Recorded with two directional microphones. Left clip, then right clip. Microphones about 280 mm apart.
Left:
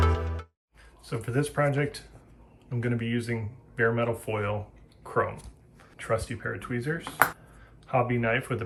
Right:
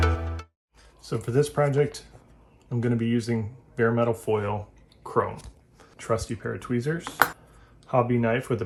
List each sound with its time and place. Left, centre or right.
1.0 s speech: centre
6.0 s speech: centre
7.0 s speech: centre
7.9 s speech: centre